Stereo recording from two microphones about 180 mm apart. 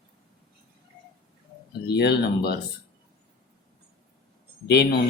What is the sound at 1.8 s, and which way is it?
Speech, 65° left (ahead or behind).